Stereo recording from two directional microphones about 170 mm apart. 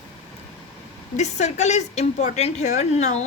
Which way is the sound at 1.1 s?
40° left (ahead or behind).